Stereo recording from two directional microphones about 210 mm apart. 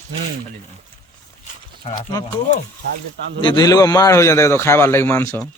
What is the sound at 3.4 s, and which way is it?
A man's voice, 20° left (ahead or behind).